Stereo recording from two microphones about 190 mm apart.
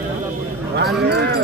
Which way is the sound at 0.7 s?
65° right (ahead or behind).